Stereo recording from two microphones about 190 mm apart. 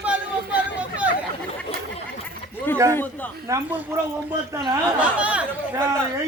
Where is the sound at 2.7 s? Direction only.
10° left (ahead or behind).